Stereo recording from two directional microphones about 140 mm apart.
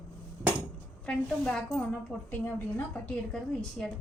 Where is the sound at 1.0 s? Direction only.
5° left (ahead or behind).